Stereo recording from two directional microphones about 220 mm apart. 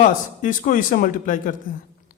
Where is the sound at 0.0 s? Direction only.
35° left (ahead or behind).